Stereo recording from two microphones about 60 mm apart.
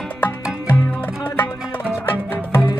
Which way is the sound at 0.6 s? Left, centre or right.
Left.